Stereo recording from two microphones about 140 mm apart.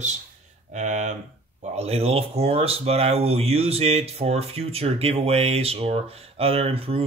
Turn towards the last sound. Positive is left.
turn(degrees=-45)  # may be behind; listen again after turning